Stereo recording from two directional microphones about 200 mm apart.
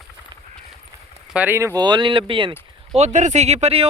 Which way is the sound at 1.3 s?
10° right (ahead or behind).